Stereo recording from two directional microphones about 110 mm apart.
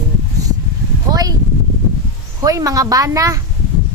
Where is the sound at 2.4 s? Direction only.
30° right (ahead or behind).